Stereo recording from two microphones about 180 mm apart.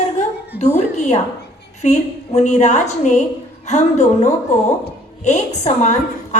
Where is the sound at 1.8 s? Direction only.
40° left (ahead or behind).